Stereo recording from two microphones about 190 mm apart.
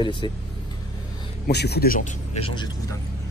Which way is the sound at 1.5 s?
60° left (ahead or behind).